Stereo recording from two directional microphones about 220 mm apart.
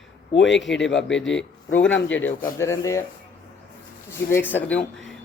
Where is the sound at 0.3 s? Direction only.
55° left (ahead or behind).